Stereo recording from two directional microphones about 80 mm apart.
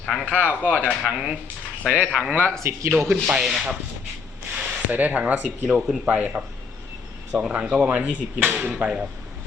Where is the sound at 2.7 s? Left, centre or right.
Right.